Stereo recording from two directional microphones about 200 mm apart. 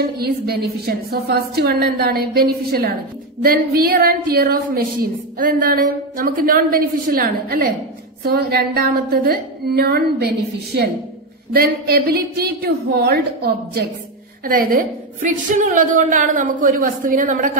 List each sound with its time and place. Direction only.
0.2 s a woman's voice: 50° right (ahead or behind)